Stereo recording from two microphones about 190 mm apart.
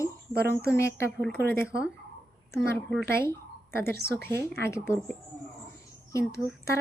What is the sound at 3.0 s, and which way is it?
Speech, 55° right (ahead or behind).